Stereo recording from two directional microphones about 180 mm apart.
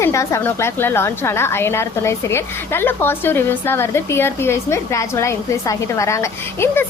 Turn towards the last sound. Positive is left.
turn(degrees=15)  # may be behind; listen again after turning